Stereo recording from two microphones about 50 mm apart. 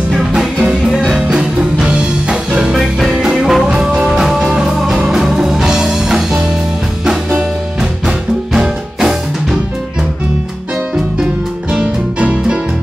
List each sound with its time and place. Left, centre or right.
0.1 s music: centre
2.7 s music: centre
8.5 s music: centre
11.7 s music: right